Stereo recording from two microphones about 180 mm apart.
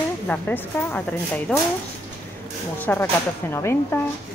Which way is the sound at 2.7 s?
10° left (ahead or behind).